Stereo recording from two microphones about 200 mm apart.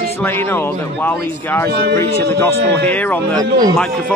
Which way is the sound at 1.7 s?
50° right (ahead or behind).